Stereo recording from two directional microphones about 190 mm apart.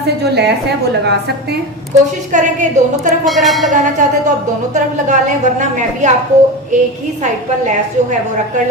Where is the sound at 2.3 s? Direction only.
40° right (ahead or behind).